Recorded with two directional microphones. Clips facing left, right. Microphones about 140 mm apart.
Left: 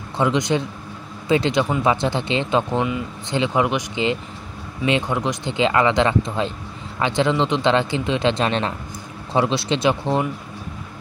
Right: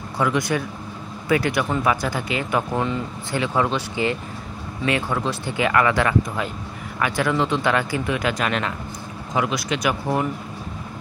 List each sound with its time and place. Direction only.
0.2 s speech: 20° left (ahead or behind)